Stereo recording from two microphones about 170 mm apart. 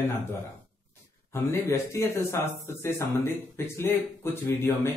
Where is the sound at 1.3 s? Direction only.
15° left (ahead or behind).